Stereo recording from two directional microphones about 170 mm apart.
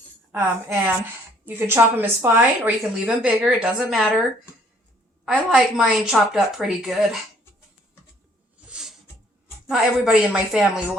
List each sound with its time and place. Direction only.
0.3 s speech: 15° right (ahead or behind)
5.2 s a woman's voice: centre (ahead or behind)
8.7 s a sound: 5° right (ahead or behind)
9.6 s a woman's voice: 5° right (ahead or behind)